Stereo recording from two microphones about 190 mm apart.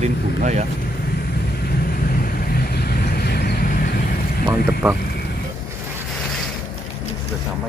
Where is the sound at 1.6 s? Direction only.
50° left (ahead or behind).